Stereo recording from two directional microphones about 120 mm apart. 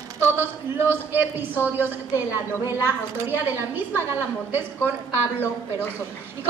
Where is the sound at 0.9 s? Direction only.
15° right (ahead or behind).